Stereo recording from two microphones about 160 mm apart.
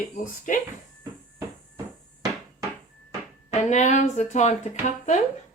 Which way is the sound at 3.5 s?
45° left (ahead or behind).